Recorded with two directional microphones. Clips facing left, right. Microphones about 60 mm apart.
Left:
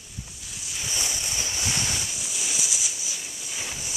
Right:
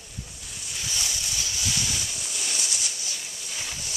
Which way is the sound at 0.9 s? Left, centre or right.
Left.